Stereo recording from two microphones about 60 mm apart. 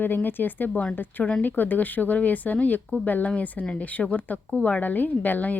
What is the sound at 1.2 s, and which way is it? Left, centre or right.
Speech, centre.